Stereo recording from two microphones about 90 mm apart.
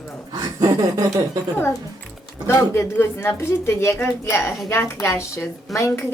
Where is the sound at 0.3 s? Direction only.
45° right (ahead or behind).